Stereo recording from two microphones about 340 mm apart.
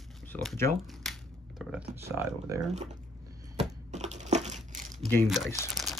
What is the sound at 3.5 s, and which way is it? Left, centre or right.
Crushing, centre.